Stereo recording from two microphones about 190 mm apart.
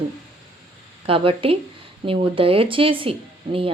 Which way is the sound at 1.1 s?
30° right (ahead or behind).